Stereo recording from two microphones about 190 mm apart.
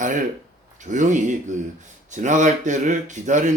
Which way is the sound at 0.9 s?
40° right (ahead or behind).